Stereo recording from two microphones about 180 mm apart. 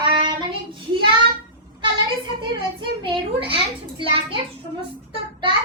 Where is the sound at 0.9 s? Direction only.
25° right (ahead or behind).